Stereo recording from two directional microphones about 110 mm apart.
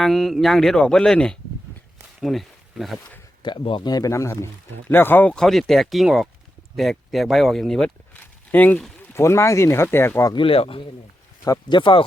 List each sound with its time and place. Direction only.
0.0 s speech: centre (ahead or behind)
3.4 s speech: 50° left (ahead or behind); by 7.9 s 5° left (ahead or behind)
8.1 s a sound: 15° left (ahead or behind)
9.1 s speech: 25° left (ahead or behind)
10.3 s speech: 55° left (ahead or behind)